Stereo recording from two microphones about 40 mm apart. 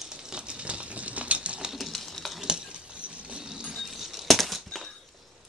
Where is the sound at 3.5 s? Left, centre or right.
Centre.